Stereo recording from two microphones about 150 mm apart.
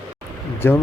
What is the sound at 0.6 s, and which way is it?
Speech, 15° left (ahead or behind).